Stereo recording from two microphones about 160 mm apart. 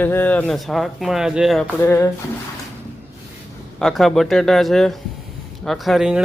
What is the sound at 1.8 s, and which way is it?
Speech, 15° left (ahead or behind).